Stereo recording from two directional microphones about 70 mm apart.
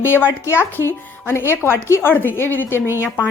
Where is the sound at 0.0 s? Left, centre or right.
Left.